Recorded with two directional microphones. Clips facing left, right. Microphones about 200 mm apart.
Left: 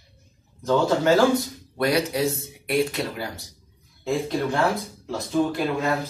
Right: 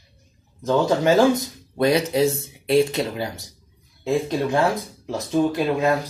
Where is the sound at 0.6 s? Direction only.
20° right (ahead or behind).